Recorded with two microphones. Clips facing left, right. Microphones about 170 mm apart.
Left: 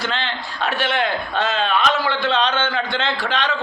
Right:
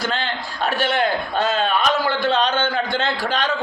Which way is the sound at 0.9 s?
40° right (ahead or behind).